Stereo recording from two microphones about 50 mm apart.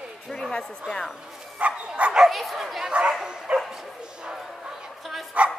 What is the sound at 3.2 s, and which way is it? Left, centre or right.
Dog, centre.